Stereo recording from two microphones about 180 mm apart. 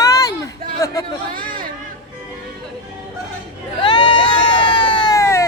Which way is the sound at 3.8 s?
25° left (ahead or behind).